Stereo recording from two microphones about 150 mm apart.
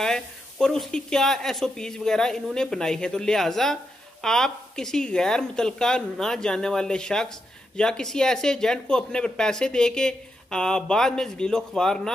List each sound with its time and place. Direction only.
0.0 s speech: 5° left (ahead or behind)